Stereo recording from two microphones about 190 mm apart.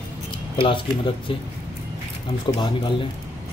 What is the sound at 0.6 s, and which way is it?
Speech, 25° left (ahead or behind).